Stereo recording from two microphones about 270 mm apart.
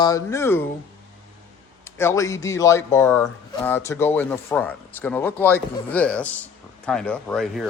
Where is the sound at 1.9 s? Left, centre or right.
Centre.